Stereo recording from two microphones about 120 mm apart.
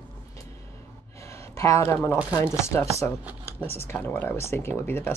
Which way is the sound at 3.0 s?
20° left (ahead or behind).